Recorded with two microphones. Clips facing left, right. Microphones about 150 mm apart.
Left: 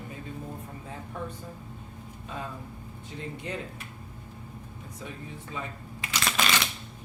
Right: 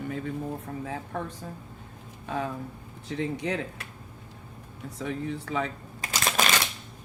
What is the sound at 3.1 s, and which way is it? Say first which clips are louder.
Speech: right 7 dB; 90° right.